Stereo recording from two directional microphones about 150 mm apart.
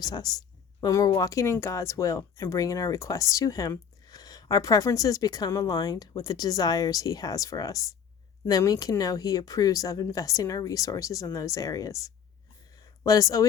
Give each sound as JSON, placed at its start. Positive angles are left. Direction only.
{"t": 0.0, "sound": "speech", "side_deg": 25}